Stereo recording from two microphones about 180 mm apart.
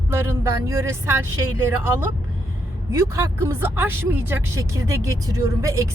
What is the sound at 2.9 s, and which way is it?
Speech, 15° right (ahead or behind).